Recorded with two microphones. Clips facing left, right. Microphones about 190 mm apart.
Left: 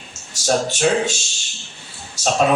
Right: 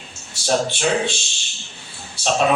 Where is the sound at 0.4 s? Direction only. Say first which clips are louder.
Left 2 dB; 45° left (ahead or behind).